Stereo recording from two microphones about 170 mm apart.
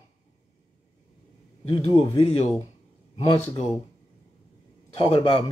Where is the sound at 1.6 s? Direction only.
30° left (ahead or behind).